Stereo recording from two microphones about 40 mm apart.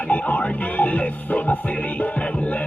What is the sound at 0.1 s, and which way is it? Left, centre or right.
Music, left.